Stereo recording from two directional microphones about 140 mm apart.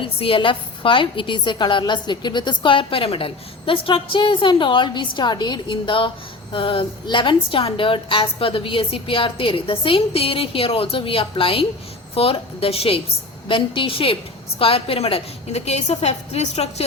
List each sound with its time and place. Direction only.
0.0 s a woman's voice: 40° left (ahead or behind)